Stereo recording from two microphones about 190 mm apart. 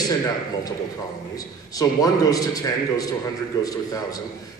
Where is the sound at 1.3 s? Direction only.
20° left (ahead or behind).